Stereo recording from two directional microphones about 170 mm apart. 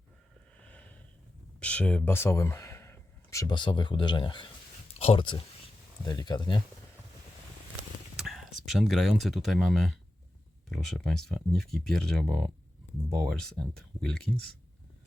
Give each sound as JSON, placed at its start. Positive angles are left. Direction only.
{"t": 0.6, "sound": "sniff", "side_deg": 10}
{"t": 1.5, "sound": "speech", "side_deg": 5}
{"t": 8.1, "sound": "speech", "side_deg": 0}